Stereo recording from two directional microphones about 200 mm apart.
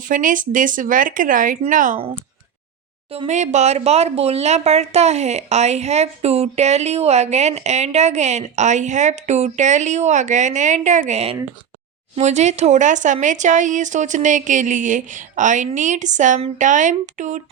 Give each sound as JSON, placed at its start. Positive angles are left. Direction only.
{"t": 0.1, "sound": "speech", "side_deg": -40}
{"t": 3.1, "sound": "speech", "side_deg": -30}